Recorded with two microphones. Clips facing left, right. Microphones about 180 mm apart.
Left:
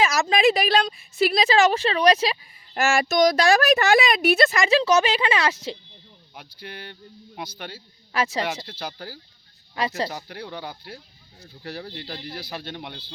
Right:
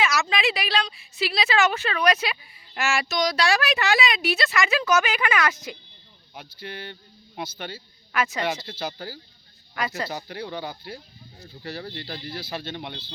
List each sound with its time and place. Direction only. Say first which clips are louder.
0.0 s a woman's voice: left 5 dB; 40° left (ahead or behind)
2.7 s speech: left 5 dB; 45° left (ahead or behind)
4.5 s speech: left 3 dB; 30° left (ahead or behind)
6.6 s speech: right 2 dB; 5° left (ahead or behind)
8.1 s a woman's voice: left 2 dB; 30° left (ahead or behind)
8.8 s speech: right 2 dB; 5° right (ahead or behind)
10.2 s speech: right 2 dB; centre (ahead or behind)